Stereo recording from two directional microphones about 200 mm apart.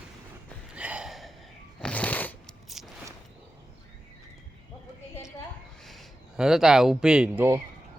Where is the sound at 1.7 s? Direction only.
5° left (ahead or behind).